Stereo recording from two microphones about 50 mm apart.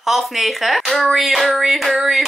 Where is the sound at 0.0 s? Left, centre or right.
Centre.